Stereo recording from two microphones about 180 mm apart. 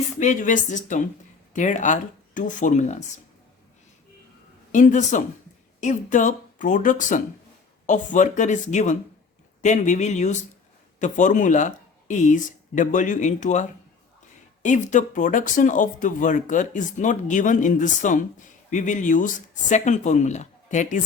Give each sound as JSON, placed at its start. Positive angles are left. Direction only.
{"t": 0.2, "sound": "speech", "side_deg": 45}
{"t": 4.7, "sound": "speech", "side_deg": 45}